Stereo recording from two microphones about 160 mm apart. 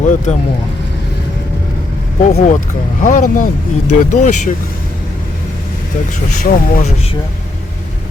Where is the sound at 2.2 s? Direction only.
50° left (ahead or behind).